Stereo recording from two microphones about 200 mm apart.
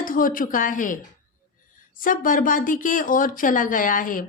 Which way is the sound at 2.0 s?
45° left (ahead or behind).